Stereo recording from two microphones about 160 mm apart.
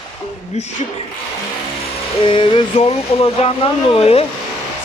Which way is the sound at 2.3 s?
35° left (ahead or behind).